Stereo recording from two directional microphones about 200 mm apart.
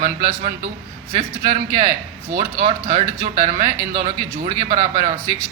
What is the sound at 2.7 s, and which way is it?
Speech, 30° right (ahead or behind).